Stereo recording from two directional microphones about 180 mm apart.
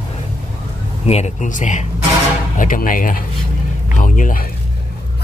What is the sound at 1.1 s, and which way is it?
Speech, 40° left (ahead or behind).